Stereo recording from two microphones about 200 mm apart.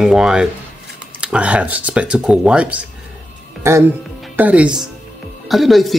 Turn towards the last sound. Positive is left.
turn(degrees=0)  # may be behind; listen again after turning